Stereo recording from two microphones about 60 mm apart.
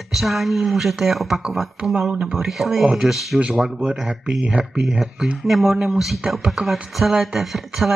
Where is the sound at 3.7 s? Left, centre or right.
Centre.